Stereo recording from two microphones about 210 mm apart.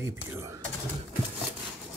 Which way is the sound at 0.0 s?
15° right (ahead or behind).